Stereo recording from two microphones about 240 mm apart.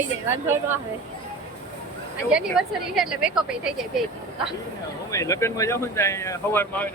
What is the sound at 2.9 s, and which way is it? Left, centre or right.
Speech, centre.